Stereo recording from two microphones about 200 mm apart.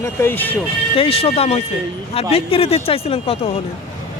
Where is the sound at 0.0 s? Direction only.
10° left (ahead or behind).